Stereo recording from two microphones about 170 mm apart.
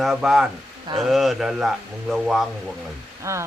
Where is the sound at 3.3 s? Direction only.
15° right (ahead or behind).